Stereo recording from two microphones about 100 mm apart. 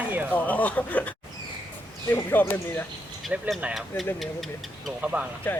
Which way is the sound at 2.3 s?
20° left (ahead or behind).